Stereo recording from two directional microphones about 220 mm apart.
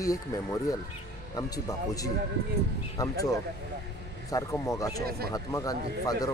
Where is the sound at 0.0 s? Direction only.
15° left (ahead or behind).